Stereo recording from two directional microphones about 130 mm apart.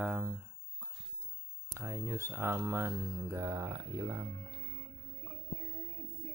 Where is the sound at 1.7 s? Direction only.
20° right (ahead or behind).